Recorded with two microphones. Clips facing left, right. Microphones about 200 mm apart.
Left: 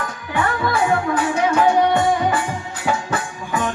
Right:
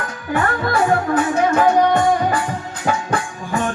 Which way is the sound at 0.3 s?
45° right (ahead or behind).